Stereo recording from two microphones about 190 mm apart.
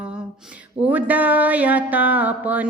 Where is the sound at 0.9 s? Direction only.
10° right (ahead or behind).